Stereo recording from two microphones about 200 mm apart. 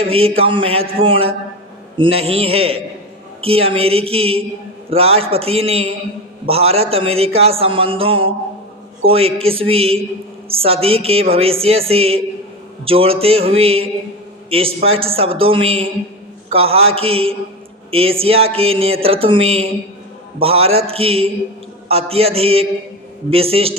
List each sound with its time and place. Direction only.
0.0 s a man's voice: 30° right (ahead or behind)